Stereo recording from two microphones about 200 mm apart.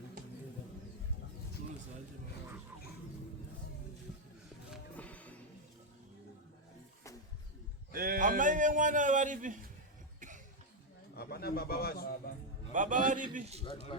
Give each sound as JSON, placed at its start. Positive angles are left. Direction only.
{"t": 4.7, "sound": "music", "side_deg": 5}
{"t": 7.9, "sound": "a man's voice", "side_deg": -45}
{"t": 10.2, "sound": "cough", "side_deg": -40}
{"t": 11.1, "sound": "speech", "side_deg": 50}
{"t": 12.7, "sound": "a man's voice", "side_deg": -40}